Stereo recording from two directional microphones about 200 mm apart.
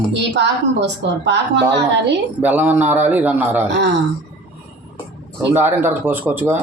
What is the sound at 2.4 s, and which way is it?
A man's voice, 10° right (ahead or behind).